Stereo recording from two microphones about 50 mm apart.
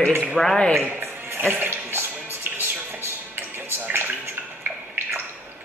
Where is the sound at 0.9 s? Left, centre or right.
Right.